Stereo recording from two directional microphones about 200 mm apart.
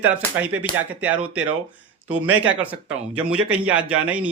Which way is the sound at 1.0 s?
5° right (ahead or behind).